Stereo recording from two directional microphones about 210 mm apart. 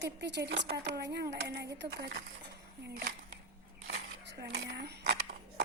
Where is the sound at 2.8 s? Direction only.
50° right (ahead or behind).